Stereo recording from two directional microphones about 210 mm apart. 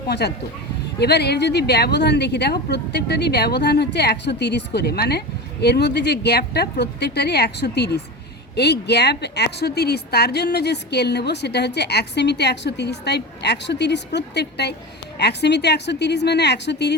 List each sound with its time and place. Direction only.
0.1 s a woman's voice: 50° left (ahead or behind)